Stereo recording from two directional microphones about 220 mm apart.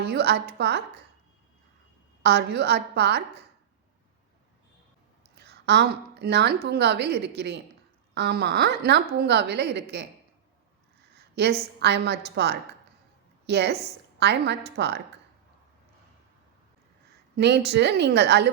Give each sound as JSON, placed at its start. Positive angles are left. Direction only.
{"t": 0.0, "sound": "a woman's voice", "side_deg": -45}
{"t": 2.2, "sound": "a woman's voice", "side_deg": -50}
{"t": 5.4, "sound": "a woman's voice", "side_deg": -50}
{"t": 11.3, "sound": "a woman's voice", "side_deg": -50}
{"t": 17.3, "sound": "a woman's voice", "side_deg": -50}